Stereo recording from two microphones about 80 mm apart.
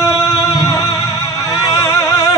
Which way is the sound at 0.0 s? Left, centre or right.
Left.